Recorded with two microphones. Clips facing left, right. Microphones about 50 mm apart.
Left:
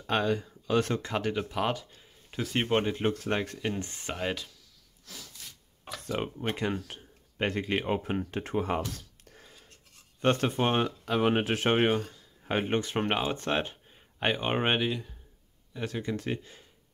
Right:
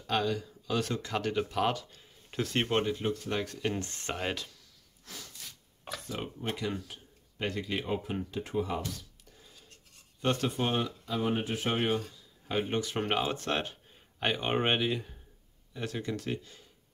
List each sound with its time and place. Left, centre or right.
0.0 s speech: left
1.5 s speech: centre
2.7 s speech: left
3.0 s speech: left
3.8 s speech: centre
4.1 s speech: centre
5.0 s snort: centre
6.0 s speech: left
10.2 s speech: left
11.1 s speech: left
11.7 s speech: left
13.0 s speech: centre
16.0 s speech: left